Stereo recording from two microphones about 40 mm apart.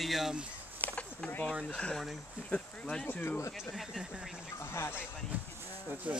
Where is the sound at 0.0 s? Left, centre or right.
Centre.